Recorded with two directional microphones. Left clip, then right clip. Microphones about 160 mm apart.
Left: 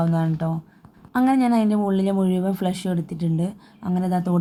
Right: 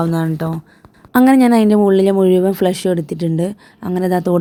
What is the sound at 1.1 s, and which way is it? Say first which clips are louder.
Speech: right 8 dB; 55° right (ahead or behind).